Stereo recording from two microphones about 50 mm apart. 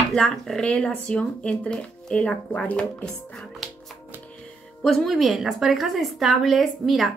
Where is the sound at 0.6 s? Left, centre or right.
Left.